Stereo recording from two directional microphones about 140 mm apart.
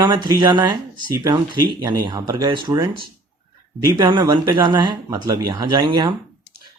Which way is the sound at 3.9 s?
30° right (ahead or behind).